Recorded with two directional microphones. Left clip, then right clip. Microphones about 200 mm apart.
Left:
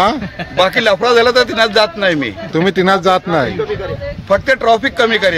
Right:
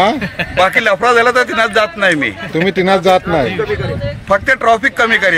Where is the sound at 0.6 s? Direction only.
20° left (ahead or behind).